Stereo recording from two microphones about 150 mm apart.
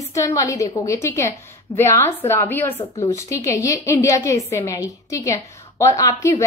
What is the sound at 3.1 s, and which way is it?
A woman's voice, 20° left (ahead or behind).